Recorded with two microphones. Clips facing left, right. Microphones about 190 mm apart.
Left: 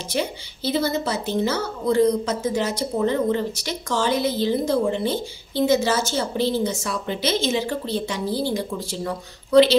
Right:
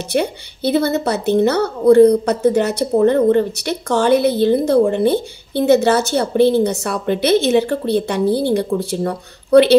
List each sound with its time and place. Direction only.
0.1 s a woman's voice: 60° right (ahead or behind)